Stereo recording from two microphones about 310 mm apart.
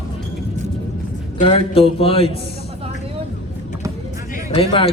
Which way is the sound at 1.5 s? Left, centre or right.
Centre.